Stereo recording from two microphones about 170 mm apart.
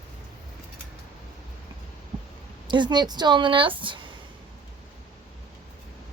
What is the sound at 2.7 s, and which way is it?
Speech, 25° right (ahead or behind).